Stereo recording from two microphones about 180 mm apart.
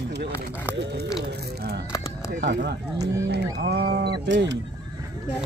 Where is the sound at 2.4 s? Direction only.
70° right (ahead or behind).